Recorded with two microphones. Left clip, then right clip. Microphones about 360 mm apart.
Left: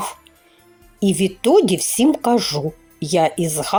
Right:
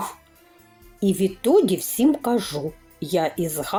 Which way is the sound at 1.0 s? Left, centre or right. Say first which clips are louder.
Left 3 dB; centre.